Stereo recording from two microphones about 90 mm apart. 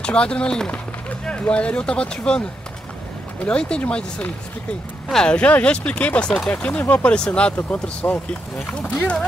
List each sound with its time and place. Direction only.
0.0 s speech: 10° left (ahead or behind)
3.4 s speech: 10° left (ahead or behind)